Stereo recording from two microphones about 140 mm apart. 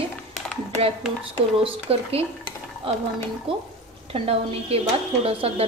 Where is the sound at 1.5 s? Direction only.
45° right (ahead or behind).